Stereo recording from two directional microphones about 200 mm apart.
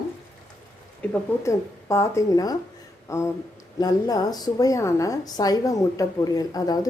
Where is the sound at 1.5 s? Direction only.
15° left (ahead or behind).